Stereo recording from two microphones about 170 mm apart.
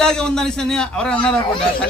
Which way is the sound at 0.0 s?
5° left (ahead or behind).